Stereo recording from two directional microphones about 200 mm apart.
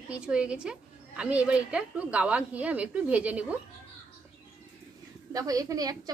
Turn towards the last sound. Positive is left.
turn(degrees=-20)  # may be behind; listen again after turning